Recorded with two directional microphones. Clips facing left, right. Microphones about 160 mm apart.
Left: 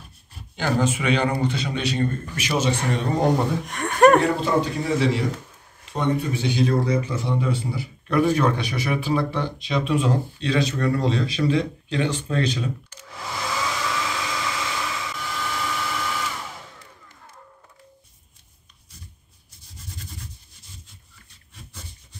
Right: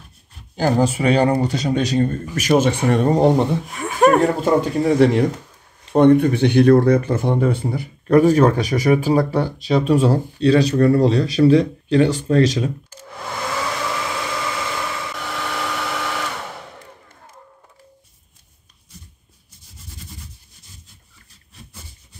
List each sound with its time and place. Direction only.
0.6 s speech: 35° right (ahead or behind)
3.2 s speech: 25° right (ahead or behind)
3.6 s speech: centre (ahead or behind)
4.2 s speech: 45° right (ahead or behind)
13.5 s vehicle: 60° right (ahead or behind)